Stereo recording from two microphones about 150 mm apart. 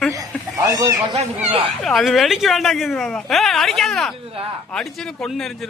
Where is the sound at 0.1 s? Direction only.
20° right (ahead or behind).